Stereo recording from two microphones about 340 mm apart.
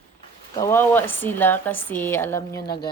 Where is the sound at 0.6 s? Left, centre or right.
Centre.